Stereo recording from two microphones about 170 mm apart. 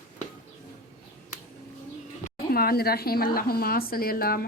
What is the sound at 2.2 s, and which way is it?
A woman's voice, 60° left (ahead or behind).